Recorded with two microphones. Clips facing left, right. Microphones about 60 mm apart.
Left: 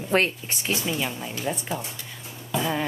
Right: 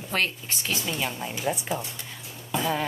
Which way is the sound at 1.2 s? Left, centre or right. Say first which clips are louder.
Right 1 dB; centre.